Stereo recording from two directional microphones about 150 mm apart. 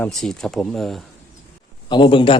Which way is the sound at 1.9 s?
35° left (ahead or behind).